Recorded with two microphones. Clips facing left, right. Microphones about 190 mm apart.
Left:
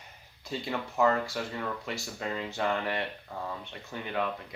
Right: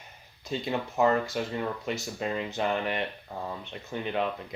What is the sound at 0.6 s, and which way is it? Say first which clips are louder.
Speech: right 1 dB; 20° right (ahead or behind).